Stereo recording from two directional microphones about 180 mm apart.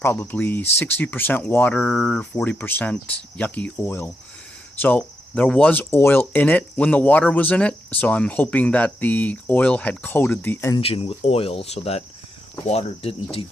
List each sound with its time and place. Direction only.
0.0 s speech: 10° left (ahead or behind)
10.8 s speech: 30° left (ahead or behind)